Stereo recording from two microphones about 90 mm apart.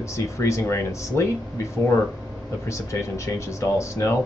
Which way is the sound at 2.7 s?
35° left (ahead or behind).